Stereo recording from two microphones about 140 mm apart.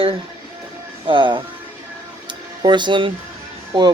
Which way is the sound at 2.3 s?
35° right (ahead or behind).